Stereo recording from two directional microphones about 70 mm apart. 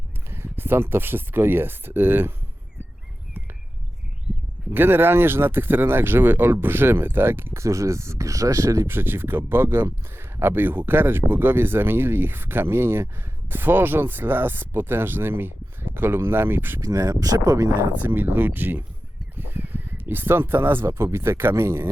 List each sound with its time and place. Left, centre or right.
0.3 s speech: right
4.7 s speech: right
8.9 s speech: right
16.8 s speech: right
18.0 s speech: right